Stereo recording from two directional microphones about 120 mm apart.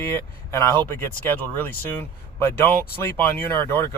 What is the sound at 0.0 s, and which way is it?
Speech, 20° left (ahead or behind).